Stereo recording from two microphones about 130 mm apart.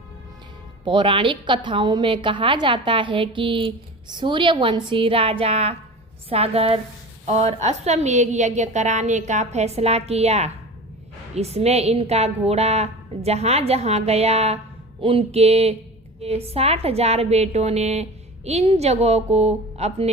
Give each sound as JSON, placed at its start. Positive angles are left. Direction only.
{"t": 0.9, "sound": "a woman's voice", "side_deg": -40}